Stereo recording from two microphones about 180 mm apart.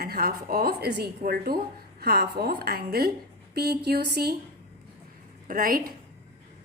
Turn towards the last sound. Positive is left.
turn(degrees=-50)  # may be behind; listen again after turning